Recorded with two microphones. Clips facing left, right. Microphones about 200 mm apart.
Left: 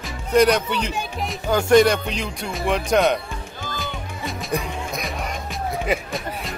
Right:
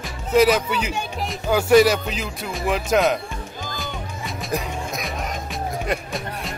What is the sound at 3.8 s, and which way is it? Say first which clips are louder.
Music: left 2 dB; centre (ahead or behind).